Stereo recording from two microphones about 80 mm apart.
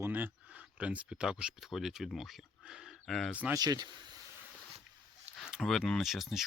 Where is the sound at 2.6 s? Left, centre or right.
Centre.